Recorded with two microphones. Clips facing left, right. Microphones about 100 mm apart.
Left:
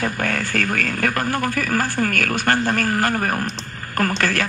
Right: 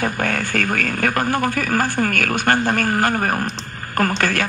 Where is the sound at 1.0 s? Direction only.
20° right (ahead or behind).